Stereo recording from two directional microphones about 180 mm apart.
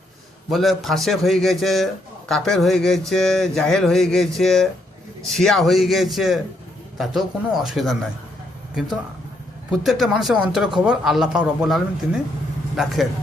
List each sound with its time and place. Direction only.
0.5 s speech: centre (ahead or behind)
9.8 s speech: centre (ahead or behind)